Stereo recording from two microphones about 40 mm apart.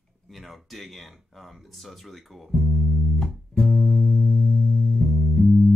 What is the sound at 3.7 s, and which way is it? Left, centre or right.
Music, centre.